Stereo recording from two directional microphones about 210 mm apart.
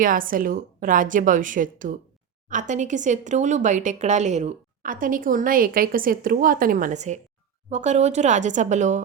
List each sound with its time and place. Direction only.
0.0 s speech: 40° right (ahead or behind)